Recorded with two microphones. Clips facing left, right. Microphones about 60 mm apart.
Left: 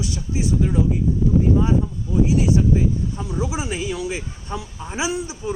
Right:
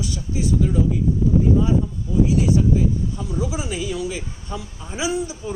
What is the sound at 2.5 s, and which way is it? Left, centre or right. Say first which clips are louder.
A woman's voice: even; left.